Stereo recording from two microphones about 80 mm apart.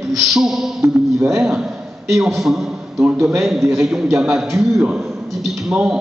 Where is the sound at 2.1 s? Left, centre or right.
Centre.